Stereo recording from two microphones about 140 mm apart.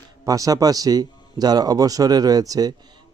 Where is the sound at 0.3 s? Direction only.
25° right (ahead or behind).